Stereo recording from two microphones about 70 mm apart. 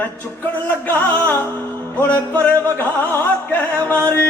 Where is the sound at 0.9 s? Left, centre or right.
Left.